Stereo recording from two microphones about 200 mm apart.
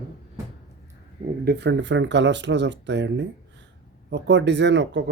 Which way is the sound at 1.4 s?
60° right (ahead or behind).